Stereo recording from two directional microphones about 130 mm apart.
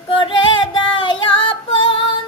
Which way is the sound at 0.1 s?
40° left (ahead or behind).